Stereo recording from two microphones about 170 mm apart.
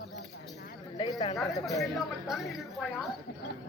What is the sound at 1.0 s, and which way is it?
Chatter, 35° left (ahead or behind).